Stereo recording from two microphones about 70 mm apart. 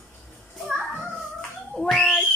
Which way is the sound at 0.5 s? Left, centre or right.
Centre.